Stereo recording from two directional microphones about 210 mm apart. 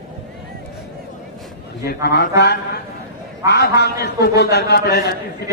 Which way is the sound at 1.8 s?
50° left (ahead or behind).